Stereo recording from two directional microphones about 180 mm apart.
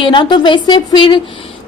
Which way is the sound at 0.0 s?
25° left (ahead or behind).